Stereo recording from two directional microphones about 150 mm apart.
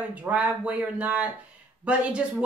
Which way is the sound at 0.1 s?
10° right (ahead or behind).